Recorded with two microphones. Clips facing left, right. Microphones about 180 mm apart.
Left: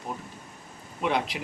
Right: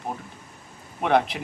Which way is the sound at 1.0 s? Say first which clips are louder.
Right 6 dB; 55° right (ahead or behind).